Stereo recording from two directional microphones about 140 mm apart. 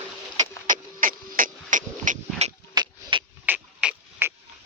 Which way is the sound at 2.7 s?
35° right (ahead or behind).